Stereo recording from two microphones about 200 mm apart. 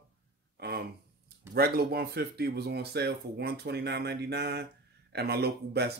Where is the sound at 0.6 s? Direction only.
50° right (ahead or behind).